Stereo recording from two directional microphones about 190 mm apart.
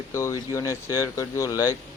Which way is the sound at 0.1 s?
15° left (ahead or behind).